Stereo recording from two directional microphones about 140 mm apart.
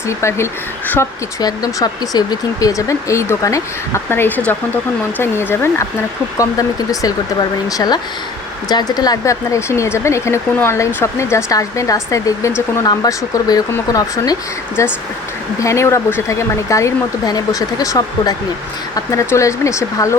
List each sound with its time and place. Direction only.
0.2 s speech: 20° left (ahead or behind)